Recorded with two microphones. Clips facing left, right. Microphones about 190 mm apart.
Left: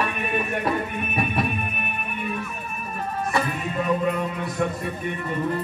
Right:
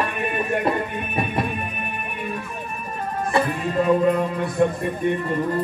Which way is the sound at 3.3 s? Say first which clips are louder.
Right 6 dB; 25° right (ahead or behind).